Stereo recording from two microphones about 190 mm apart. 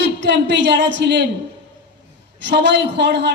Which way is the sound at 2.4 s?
65° right (ahead or behind).